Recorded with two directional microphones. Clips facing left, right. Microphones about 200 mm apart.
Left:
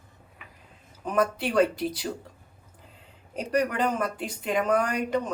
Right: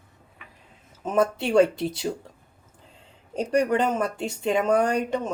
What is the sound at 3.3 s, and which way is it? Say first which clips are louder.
A woman's voice: right 4 dB; 30° right (ahead or behind).